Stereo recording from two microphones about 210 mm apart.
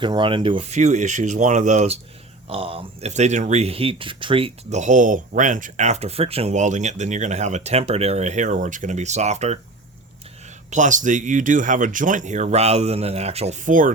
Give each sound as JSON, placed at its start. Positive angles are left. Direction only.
{"t": 0.0, "sound": "speech", "side_deg": -20}
{"t": 10.7, "sound": "speech", "side_deg": -35}